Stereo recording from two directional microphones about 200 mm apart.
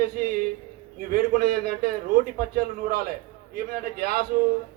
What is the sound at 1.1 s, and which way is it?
Speech, 45° right (ahead or behind).